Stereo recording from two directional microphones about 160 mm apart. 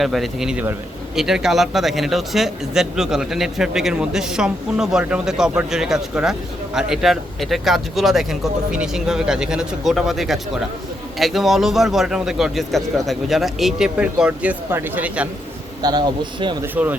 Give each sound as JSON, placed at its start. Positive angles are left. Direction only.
{"t": 0.0, "sound": "speech", "side_deg": 0}
{"t": 15.8, "sound": "a man's voice", "side_deg": -25}
{"t": 16.7, "sound": "speech", "side_deg": -10}